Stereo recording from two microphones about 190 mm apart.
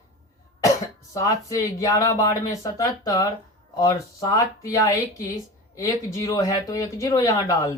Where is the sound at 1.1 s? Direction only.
15° left (ahead or behind).